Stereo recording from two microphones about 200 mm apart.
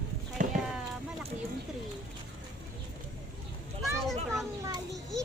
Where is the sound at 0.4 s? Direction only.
40° right (ahead or behind).